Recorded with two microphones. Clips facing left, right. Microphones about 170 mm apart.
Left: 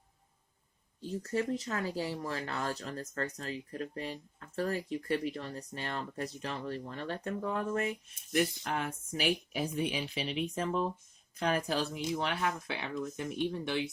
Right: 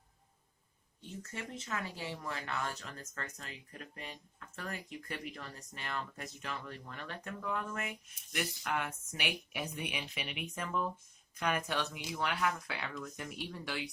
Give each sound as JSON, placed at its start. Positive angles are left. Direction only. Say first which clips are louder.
{"t": 1.0, "sound": "speech", "louder": "left 12 dB", "side_deg": 35}